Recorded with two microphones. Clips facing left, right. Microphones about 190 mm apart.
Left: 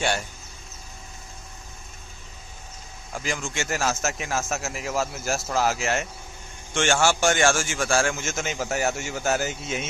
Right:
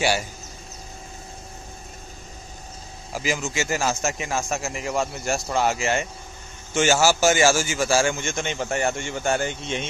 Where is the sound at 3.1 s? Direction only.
5° right (ahead or behind).